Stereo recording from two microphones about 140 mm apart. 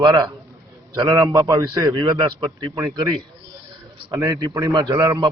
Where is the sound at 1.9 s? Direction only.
35° right (ahead or behind).